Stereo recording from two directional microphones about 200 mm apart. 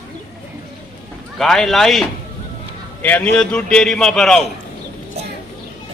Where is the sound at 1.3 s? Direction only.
Centre (ahead or behind).